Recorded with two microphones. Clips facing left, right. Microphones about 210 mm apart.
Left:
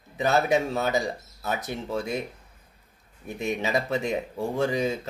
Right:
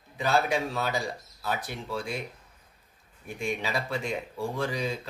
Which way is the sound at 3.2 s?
20° left (ahead or behind).